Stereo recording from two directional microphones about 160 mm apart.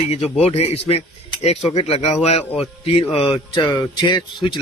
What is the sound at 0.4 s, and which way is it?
Speech, 40° left (ahead or behind).